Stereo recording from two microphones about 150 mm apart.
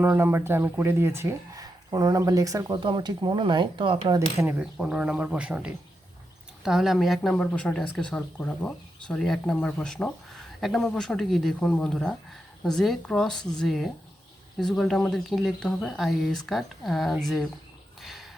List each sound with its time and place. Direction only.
0.0 s speech: 15° right (ahead or behind); by 3.9 s 30° right (ahead or behind)
4.4 s speech: 10° right (ahead or behind)
18.0 s a sound: centre (ahead or behind)